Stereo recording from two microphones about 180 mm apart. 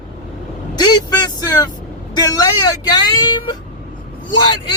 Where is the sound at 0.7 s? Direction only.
20° left (ahead or behind).